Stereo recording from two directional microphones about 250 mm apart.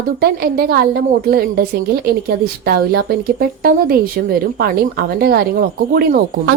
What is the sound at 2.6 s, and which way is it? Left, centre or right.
A woman's voice, right.